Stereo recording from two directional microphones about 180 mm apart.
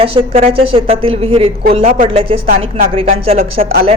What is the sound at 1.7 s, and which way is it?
Music, 45° right (ahead or behind).